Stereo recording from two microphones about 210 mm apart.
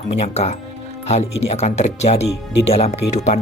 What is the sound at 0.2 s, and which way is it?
Speech, 30° left (ahead or behind).